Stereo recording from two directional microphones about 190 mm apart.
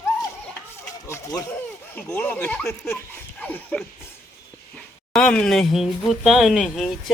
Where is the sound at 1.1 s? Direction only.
20° left (ahead or behind).